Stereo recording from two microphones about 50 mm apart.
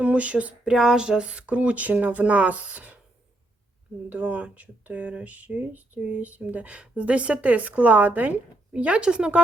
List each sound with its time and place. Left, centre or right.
0.0 s speech: right
0.6 s speech: centre; by 3.0 s right
4.1 s speech: right